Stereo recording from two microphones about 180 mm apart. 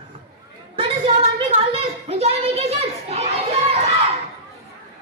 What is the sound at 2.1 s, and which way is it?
A child's voice, 35° right (ahead or behind).